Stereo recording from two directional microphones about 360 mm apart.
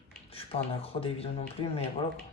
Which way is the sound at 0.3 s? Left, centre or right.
Centre.